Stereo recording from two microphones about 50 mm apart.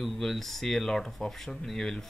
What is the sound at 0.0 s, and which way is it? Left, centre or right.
Speech, centre.